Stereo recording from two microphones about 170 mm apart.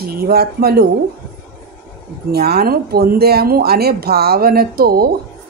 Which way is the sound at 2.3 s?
65° right (ahead or behind).